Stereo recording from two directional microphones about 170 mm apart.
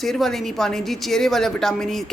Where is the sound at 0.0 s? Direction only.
Centre (ahead or behind).